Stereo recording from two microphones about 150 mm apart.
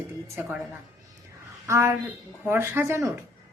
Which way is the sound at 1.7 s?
20° right (ahead or behind).